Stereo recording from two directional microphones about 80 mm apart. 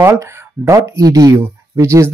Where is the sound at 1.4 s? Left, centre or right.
Right.